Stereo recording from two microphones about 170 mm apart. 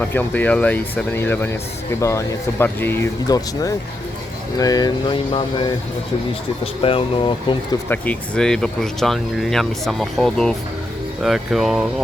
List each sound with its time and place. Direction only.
0.0 s speech: 10° left (ahead or behind); by 5.7 s 30° left (ahead or behind)
6.8 s speech: 30° left (ahead or behind)
7.9 s speech: 5° left (ahead or behind)